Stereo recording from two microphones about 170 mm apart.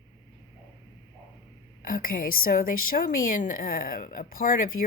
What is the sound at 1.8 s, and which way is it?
A woman's voice, 55° left (ahead or behind).